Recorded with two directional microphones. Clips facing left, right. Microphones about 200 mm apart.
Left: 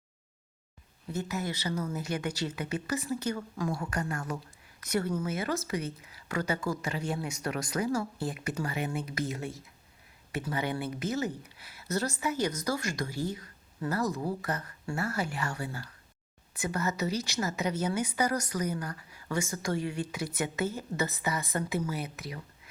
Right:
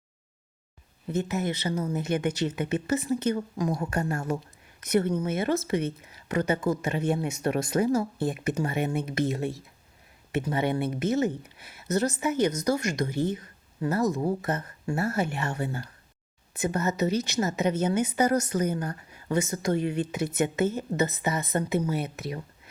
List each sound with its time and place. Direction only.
1.1 s a woman's voice: 20° right (ahead or behind)